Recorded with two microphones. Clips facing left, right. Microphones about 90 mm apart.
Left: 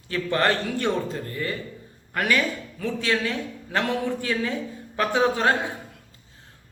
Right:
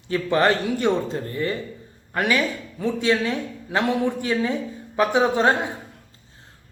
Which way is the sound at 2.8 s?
20° right (ahead or behind).